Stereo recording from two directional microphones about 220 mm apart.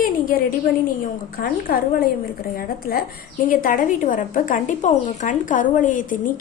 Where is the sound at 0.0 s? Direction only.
40° left (ahead or behind).